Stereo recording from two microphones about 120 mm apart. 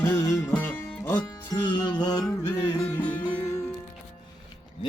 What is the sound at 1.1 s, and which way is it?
Music, 40° left (ahead or behind).